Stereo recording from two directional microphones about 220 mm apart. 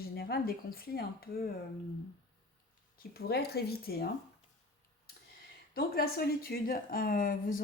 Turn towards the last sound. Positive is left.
turn(degrees=40)  # may be behind; listen again after turning